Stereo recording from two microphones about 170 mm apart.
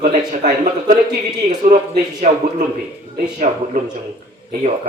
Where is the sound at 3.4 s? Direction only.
40° right (ahead or behind).